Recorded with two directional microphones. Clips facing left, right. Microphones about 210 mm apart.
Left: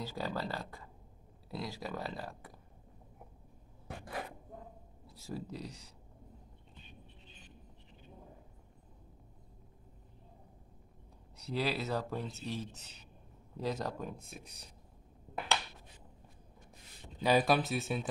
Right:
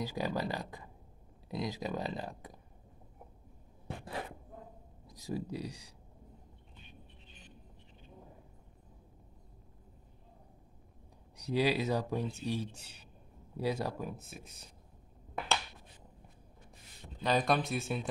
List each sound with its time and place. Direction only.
0.0 s speech: 15° right (ahead or behind)
3.8 s a sound: 25° right (ahead or behind)
5.0 s speech: 15° right (ahead or behind)
11.3 s speech: 15° right (ahead or behind)
17.2 s speech: 10° left (ahead or behind)